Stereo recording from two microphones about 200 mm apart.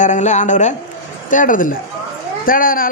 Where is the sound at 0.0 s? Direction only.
35° left (ahead or behind).